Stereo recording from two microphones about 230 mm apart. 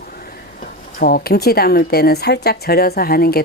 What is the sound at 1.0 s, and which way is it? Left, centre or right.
A woman's voice, left.